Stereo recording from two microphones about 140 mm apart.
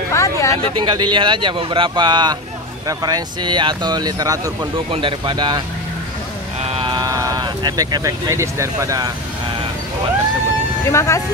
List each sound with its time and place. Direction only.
0.1 s a sound: 20° left (ahead or behind)
0.6 s speech: 35° right (ahead or behind)
4.9 s speech: 35° right (ahead or behind)
6.7 s a sound: 40° right (ahead or behind)
7.1 s speech: 25° right (ahead or behind)
10.9 s speech: 20° left (ahead or behind)